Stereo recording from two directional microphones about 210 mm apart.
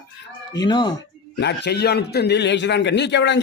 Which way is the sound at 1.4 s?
50° left (ahead or behind).